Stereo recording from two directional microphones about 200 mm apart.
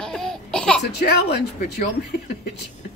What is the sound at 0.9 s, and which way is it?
Speech, 55° left (ahead or behind).